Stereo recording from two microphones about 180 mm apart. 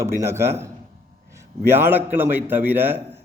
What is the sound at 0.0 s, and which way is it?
A man's voice, 15° right (ahead or behind).